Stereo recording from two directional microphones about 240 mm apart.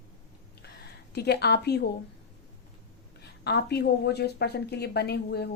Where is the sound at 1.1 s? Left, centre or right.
Left.